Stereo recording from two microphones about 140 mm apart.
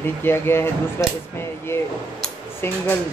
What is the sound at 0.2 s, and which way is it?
Speech, 15° left (ahead or behind).